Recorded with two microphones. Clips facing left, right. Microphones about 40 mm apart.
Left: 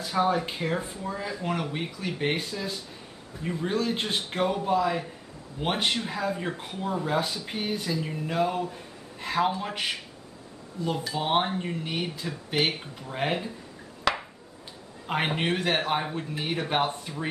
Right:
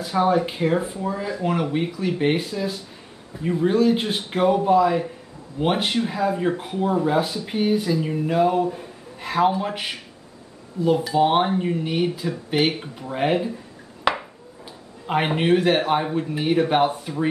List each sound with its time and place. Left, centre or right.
0.0 s a man's voice: centre
14.1 s a sound: centre
15.0 s speech: centre